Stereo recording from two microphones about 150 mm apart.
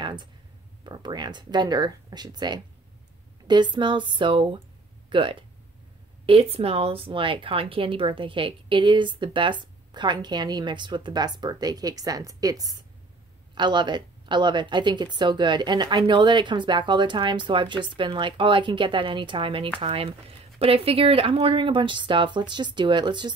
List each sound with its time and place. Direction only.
0.0 s clicking: 30° right (ahead or behind)
0.8 s speech: 30° right (ahead or behind)